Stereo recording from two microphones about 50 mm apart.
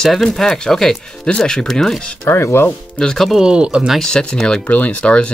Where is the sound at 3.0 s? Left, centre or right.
Centre.